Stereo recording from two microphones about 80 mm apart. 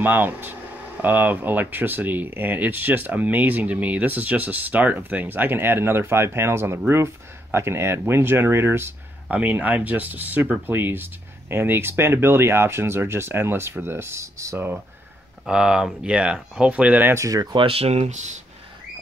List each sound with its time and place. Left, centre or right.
0.0 s speech: right
15.4 s speech: centre
17.1 s speech: right